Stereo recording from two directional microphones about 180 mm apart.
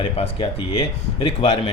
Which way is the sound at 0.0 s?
30° left (ahead or behind).